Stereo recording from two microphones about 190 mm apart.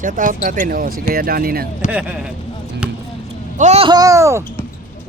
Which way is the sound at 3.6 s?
35° right (ahead or behind).